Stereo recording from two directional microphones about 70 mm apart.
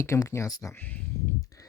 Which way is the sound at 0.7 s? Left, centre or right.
Left.